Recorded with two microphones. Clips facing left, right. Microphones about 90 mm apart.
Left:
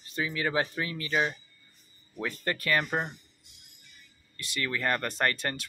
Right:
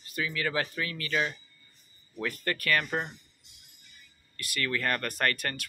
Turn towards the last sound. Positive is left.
turn(degrees=25)  # may be behind; listen again after turning